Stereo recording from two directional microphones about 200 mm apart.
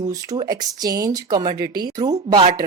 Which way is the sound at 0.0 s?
20° right (ahead or behind).